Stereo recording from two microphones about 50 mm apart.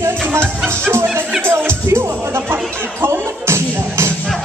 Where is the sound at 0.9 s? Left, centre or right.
Right.